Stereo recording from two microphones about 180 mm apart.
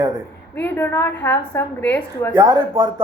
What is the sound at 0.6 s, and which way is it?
A woman's voice, 10° left (ahead or behind).